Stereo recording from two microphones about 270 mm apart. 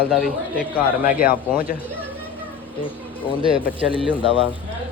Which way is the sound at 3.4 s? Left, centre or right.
Right.